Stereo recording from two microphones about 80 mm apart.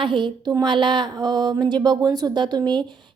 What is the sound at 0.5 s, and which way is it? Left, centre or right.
Speech, right.